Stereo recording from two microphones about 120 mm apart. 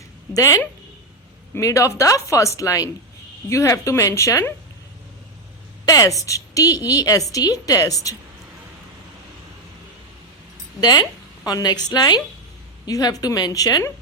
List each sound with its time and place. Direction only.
0.3 s a woman's voice: 30° left (ahead or behind)
5.8 s a woman's voice: 30° left (ahead or behind)
10.8 s a woman's voice: 35° left (ahead or behind)